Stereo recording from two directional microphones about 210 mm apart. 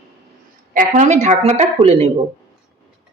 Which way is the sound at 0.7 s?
40° right (ahead or behind).